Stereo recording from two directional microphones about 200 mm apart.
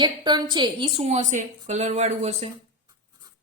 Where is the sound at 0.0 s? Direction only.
20° right (ahead or behind).